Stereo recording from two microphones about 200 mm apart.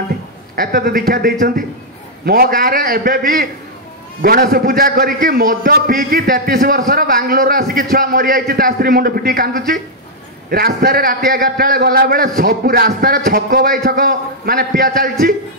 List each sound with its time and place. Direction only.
0.6 s a man's voice: 50° right (ahead or behind)